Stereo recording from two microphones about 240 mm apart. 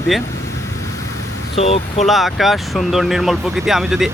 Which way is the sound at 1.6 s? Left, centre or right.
Left.